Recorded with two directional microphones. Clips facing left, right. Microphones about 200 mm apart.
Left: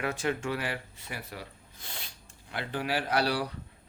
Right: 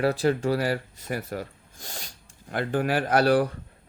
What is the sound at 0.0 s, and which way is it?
Speech, 35° right (ahead or behind).